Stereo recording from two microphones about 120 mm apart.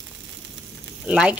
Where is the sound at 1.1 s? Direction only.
10° right (ahead or behind).